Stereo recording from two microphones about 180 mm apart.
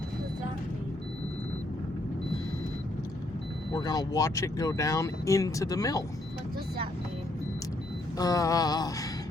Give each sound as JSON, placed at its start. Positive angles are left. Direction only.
{"t": 3.7, "sound": "speech", "side_deg": 20}
{"t": 8.2, "sound": "speech", "side_deg": 20}